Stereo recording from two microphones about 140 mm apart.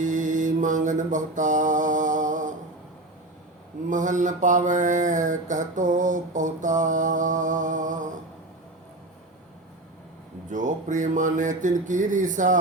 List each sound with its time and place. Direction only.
0.0 s mantra: 65° right (ahead or behind)
3.8 s mantra: 65° right (ahead or behind)
10.5 s mantra: 65° right (ahead or behind)